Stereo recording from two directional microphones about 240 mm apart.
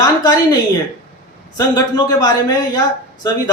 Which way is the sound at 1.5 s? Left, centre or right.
Centre.